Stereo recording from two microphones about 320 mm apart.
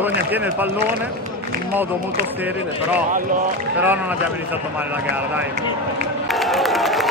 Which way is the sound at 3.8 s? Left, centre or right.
Centre.